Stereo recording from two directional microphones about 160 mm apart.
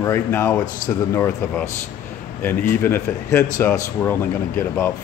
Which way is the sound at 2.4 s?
15° left (ahead or behind).